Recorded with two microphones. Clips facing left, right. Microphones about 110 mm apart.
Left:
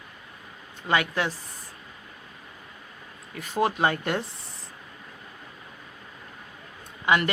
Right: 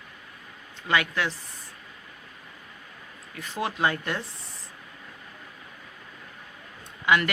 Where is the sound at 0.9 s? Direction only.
40° left (ahead or behind).